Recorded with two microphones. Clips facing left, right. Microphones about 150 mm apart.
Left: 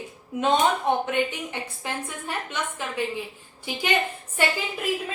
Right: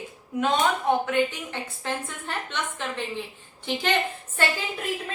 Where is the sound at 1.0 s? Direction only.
15° left (ahead or behind).